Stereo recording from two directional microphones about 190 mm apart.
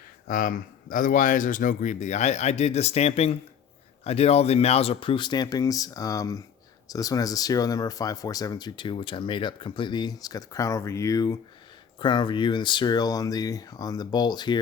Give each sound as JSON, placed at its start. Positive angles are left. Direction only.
{"t": 0.3, "sound": "speech", "side_deg": 45}